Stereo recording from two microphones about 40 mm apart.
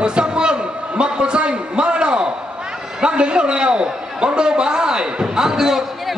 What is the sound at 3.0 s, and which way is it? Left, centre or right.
A man's voice, right.